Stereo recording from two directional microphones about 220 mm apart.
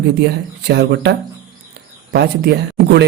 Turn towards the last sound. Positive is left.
turn(degrees=-50)  # may be behind; listen again after turning